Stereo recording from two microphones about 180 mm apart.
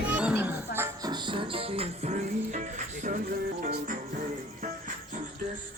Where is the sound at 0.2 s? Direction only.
5° right (ahead or behind).